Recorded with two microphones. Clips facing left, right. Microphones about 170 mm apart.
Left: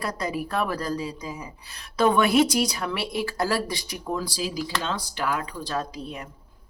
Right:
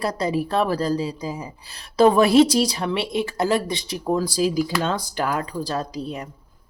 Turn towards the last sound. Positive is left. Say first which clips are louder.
# right 3 dB
turn(degrees=-35)  # may be behind; listen again after turning